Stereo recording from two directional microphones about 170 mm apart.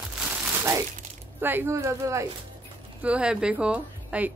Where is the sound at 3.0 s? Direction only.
5° right (ahead or behind).